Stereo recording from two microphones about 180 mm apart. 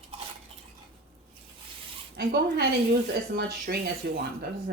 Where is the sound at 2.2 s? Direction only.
65° right (ahead or behind).